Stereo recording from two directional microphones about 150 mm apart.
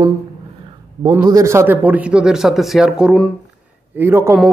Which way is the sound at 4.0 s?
15° right (ahead or behind).